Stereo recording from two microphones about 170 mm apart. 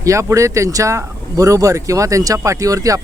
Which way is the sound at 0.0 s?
15° right (ahead or behind).